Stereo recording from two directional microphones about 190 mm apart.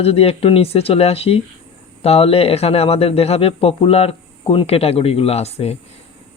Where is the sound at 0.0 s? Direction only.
30° left (ahead or behind).